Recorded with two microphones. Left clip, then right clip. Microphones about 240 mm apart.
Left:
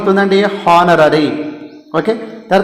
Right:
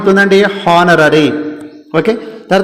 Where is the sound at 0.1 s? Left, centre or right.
Right.